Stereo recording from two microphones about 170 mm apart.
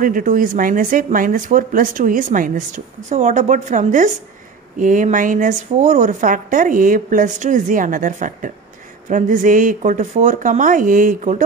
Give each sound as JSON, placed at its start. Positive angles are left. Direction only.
{"t": 0.0, "sound": "speech", "side_deg": -50}